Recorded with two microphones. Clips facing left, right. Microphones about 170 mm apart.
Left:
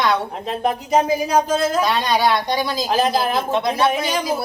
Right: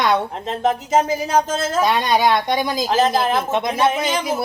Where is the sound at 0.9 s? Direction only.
15° left (ahead or behind).